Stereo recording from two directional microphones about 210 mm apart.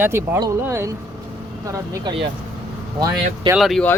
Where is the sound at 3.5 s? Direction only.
Centre (ahead or behind).